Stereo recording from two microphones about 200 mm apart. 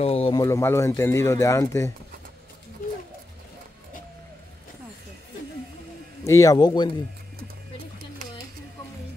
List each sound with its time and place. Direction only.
0.0 s speech: 30° left (ahead or behind)
0.4 s speech: 15° left (ahead or behind)
6.2 s speech: 15° left (ahead or behind)